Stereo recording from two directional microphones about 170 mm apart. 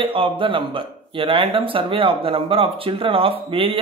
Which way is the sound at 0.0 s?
30° right (ahead or behind).